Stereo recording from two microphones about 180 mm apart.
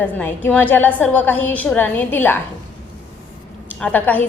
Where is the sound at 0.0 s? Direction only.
10° left (ahead or behind).